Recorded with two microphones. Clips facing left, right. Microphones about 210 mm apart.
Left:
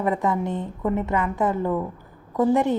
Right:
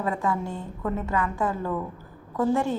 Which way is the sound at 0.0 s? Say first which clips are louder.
Left 4 dB; 20° left (ahead or behind).